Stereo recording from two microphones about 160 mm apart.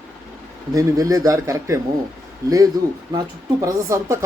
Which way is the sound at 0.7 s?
20° right (ahead or behind).